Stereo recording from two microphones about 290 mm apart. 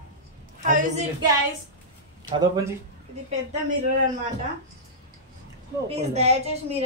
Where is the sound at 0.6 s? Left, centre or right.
Right.